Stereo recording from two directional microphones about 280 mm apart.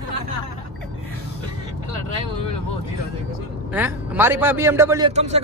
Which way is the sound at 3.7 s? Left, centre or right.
Centre.